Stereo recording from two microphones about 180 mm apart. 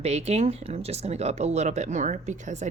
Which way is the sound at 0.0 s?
35° right (ahead or behind).